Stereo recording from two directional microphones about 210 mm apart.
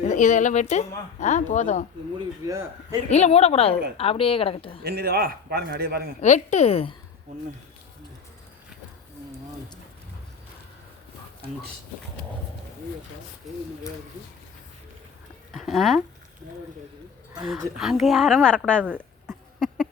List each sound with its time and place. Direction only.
0.0 s speech: 35° left (ahead or behind)
2.1 s speech: 20° right (ahead or behind)
3.1 s a woman's voice: 30° left (ahead or behind)
4.8 s a man's voice: 45° right (ahead or behind)
6.2 s speech: 35° left (ahead or behind)
15.5 s a woman's voice: centre (ahead or behind)
17.7 s a woman's voice: centre (ahead or behind)
18.9 s a sound: 10° right (ahead or behind)